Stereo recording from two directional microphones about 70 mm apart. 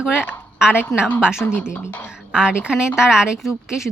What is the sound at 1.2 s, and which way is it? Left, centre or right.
Speech, centre.